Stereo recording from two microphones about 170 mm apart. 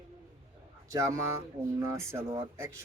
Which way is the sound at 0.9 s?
15° right (ahead or behind).